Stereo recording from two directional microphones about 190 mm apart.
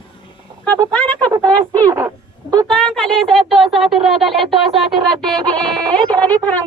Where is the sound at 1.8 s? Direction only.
15° right (ahead or behind).